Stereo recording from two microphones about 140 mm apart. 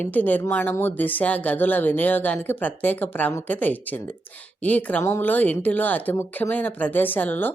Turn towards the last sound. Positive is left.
turn(degrees=15)  # may be behind; listen again after turning